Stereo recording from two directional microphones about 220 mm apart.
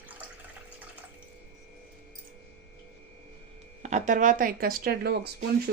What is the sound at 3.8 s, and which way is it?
Speech, 35° right (ahead or behind).